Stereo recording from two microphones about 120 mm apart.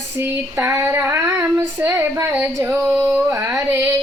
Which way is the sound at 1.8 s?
20° right (ahead or behind).